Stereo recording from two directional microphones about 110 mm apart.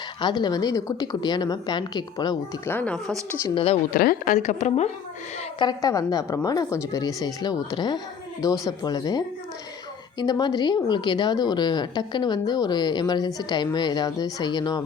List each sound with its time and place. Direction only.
0.2 s a woman's voice: 40° left (ahead or behind)
2.6 s speech: 15° left (ahead or behind)
3.4 s speech: 55° left (ahead or behind)
4.4 s a woman's voice: 90° left
5.5 s a woman's voice: 40° left (ahead or behind)